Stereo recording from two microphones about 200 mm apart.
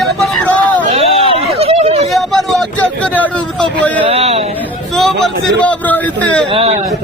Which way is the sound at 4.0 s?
30° right (ahead or behind).